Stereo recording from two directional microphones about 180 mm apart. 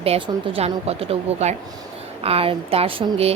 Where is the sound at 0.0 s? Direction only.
30° right (ahead or behind).